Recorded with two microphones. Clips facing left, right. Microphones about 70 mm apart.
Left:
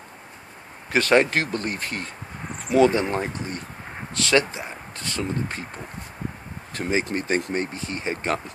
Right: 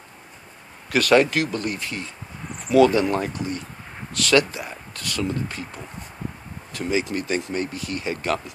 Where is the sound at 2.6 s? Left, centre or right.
Left.